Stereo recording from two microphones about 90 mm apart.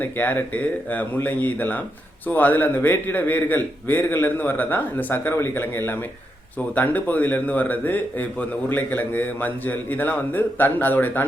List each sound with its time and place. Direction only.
0.0 s a man's voice: 20° left (ahead or behind)